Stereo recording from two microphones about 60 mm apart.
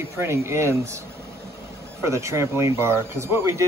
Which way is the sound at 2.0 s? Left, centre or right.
Right.